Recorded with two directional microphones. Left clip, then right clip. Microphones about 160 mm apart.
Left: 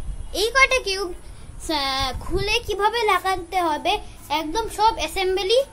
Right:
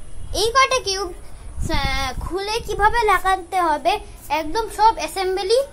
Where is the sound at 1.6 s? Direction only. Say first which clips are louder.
Even; 20° left (ahead or behind).